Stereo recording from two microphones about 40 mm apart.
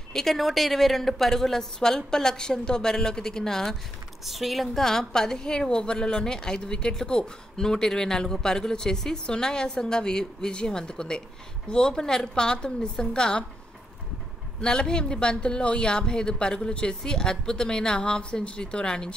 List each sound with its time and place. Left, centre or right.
0.1 s a woman's voice: centre
4.3 s a woman's voice: centre
14.6 s a woman's voice: centre